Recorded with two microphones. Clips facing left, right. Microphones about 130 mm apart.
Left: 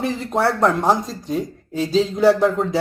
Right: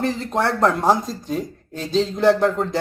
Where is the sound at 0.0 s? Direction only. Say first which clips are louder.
Left 1 dB; 5° left (ahead or behind).